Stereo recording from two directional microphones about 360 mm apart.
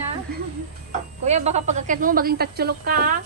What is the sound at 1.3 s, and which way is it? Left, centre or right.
A woman's voice, centre.